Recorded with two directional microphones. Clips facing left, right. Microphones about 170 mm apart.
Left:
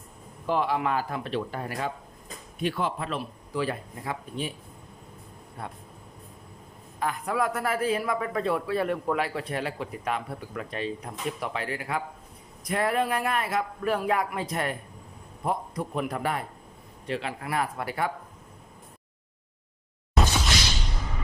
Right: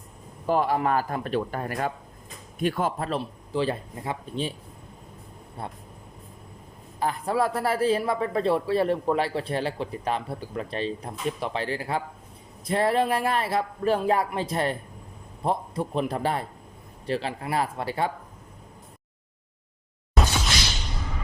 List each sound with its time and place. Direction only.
0.4 s speech: 45° right (ahead or behind); by 4.5 s 25° right (ahead or behind)
5.6 s speech: 30° right (ahead or behind)
7.0 s speech: 30° right (ahead or behind)
20.1 s a sound: centre (ahead or behind)